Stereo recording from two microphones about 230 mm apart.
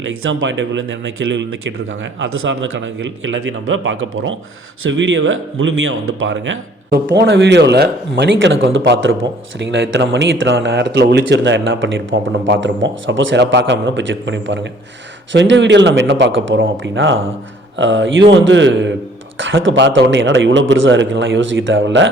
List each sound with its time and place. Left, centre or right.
0.3 s a man's voice: right